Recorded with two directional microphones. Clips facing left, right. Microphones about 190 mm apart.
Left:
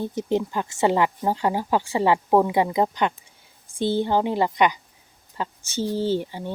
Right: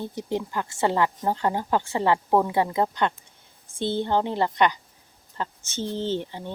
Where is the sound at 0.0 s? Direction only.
20° left (ahead or behind).